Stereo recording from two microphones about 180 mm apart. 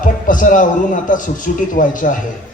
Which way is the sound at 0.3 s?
45° left (ahead or behind).